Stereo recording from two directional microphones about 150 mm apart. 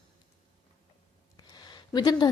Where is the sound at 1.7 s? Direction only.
25° left (ahead or behind).